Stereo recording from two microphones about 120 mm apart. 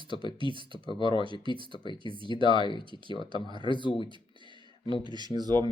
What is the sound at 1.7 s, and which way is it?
Speech, 40° left (ahead or behind).